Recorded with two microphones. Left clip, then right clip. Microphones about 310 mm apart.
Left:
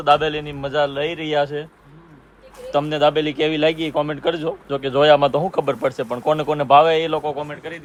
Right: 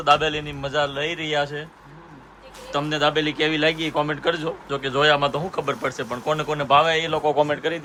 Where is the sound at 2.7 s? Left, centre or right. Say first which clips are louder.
Left 4 dB; centre.